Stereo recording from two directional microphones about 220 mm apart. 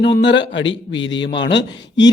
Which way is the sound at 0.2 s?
55° left (ahead or behind).